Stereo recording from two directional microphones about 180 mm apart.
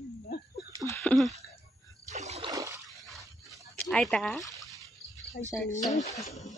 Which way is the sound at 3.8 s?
Centre (ahead or behind).